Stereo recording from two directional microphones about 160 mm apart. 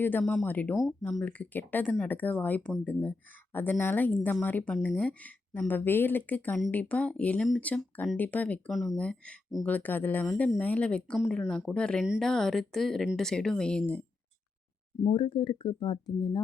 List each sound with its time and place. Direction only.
0.0 s speech: 10° left (ahead or behind)
0.8 s speech: centre (ahead or behind)
1.2 s speech: 10° left (ahead or behind)
15.0 s speech: 30° left (ahead or behind)